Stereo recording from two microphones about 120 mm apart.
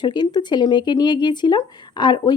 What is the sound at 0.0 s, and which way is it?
Speech, 40° left (ahead or behind).